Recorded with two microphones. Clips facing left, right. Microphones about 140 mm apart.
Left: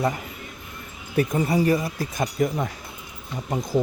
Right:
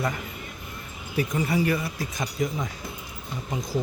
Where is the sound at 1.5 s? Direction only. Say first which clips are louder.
Left 4 dB; 35° left (ahead or behind).